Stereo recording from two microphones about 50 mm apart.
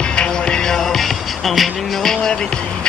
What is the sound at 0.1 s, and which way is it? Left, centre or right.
Music, centre.